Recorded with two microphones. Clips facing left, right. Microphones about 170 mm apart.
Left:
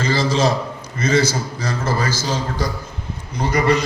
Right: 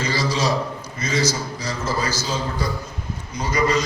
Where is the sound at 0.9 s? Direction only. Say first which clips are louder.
Left 5 dB; 55° left (ahead or behind).